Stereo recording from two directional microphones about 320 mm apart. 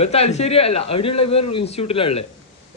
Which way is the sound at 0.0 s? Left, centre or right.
Centre.